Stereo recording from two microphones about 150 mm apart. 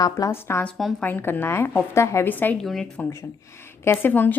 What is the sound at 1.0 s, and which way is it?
A woman's voice, 15° left (ahead or behind).